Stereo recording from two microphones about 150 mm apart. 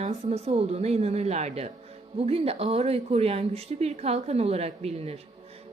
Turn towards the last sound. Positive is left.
turn(degrees=-45)  # may be behind; listen again after turning